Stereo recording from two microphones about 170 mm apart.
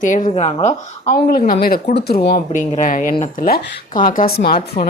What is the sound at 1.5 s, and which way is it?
Speech, 60° left (ahead or behind).